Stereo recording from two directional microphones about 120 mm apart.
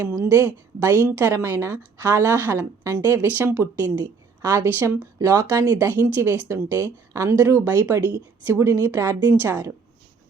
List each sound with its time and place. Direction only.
0.0 s a woman's voice: 15° right (ahead or behind)
6.1 s a woman's voice: 20° right (ahead or behind)